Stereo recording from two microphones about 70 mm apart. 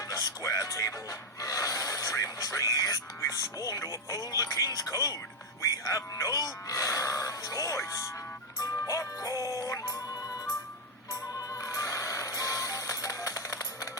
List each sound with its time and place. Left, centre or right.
0.1 s music: left
1.4 s speech: left
8.6 s music: left